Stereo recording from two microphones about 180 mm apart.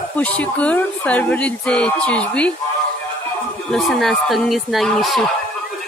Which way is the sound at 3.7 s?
Centre (ahead or behind).